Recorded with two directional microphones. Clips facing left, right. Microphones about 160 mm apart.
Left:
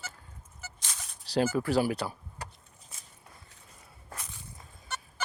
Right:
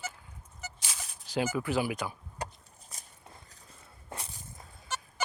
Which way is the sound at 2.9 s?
40° right (ahead or behind).